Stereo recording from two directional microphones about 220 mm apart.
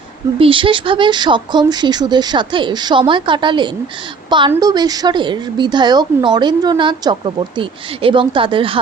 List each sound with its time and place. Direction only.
0.3 s a woman's voice: 25° right (ahead or behind)